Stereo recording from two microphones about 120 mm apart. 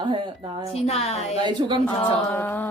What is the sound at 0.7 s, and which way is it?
Speech, 60° left (ahead or behind).